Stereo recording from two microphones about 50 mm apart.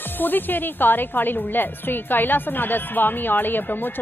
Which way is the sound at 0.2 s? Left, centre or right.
Left.